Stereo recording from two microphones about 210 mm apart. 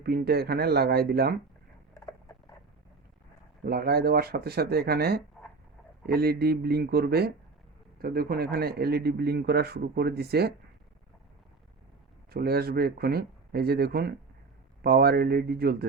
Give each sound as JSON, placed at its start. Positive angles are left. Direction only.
{"t": 0.0, "sound": "speech", "side_deg": -50}
{"t": 3.6, "sound": "speech", "side_deg": -45}
{"t": 12.3, "sound": "speech", "side_deg": -50}